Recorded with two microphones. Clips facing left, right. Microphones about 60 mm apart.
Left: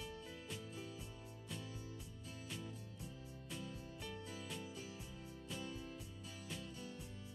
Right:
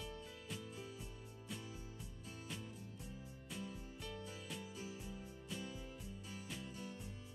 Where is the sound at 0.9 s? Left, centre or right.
Centre.